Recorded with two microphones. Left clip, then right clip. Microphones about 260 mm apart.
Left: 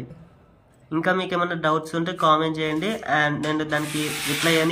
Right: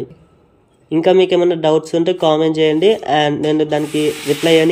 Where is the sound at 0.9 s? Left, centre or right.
Left.